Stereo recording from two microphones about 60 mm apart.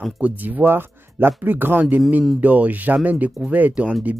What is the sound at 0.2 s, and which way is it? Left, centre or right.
A man's voice, right.